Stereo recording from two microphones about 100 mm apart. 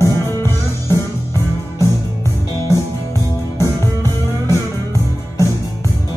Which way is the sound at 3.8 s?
25° left (ahead or behind).